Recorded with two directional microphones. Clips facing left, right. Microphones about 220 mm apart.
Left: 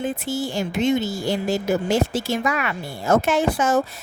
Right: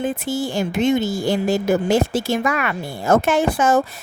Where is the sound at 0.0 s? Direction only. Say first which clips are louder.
Right 3 dB; 50° right (ahead or behind).